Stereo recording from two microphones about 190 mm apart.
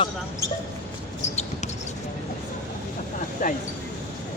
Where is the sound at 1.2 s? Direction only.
35° left (ahead or behind).